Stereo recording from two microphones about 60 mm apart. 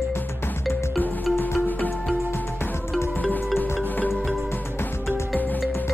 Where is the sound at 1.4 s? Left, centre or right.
Left.